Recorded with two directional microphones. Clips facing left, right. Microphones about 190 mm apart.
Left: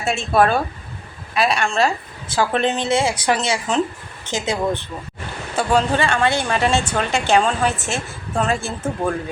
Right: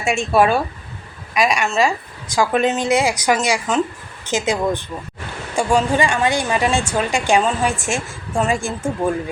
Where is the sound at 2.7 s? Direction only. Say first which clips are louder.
Right 2 dB; 30° left (ahead or behind).